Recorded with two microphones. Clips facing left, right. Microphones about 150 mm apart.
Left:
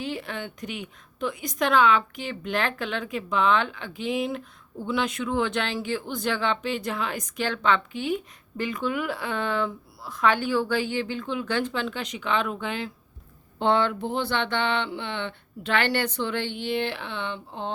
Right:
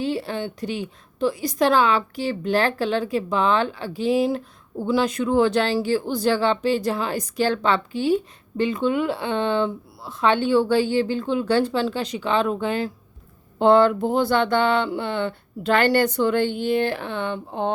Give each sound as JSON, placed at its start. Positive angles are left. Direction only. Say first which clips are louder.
{"t": 0.0, "sound": "a woman's voice", "louder": "right 7 dB", "side_deg": -30}